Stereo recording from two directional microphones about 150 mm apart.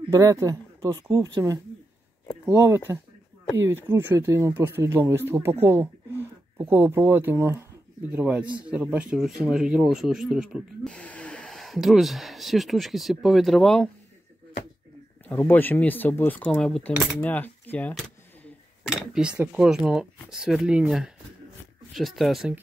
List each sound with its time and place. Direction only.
0.1 s speech: 20° right (ahead or behind); by 10.9 s 5° right (ahead or behind)
10.9 s speech: 5° left (ahead or behind)
15.2 s speech: 15° left (ahead or behind)
17.2 s a sound: 10° left (ahead or behind)
18.9 s a sound: 5° right (ahead or behind)
19.4 s speech: 5° right (ahead or behind)